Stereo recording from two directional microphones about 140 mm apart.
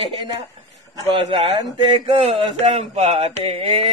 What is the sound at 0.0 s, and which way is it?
Speech, 40° right (ahead or behind).